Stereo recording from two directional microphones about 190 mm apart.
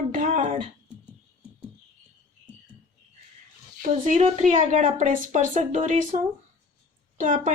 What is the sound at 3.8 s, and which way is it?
Speech, 40° right (ahead or behind).